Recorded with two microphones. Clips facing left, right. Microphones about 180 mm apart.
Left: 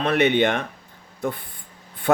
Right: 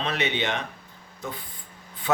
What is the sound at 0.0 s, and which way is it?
Speech, 55° left (ahead or behind).